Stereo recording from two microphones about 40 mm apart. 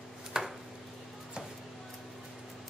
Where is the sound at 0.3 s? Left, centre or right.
Centre.